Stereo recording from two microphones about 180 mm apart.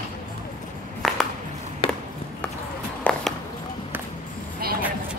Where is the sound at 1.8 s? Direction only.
30° left (ahead or behind).